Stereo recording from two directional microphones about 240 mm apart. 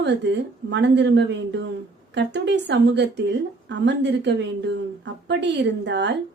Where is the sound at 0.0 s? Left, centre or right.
Right.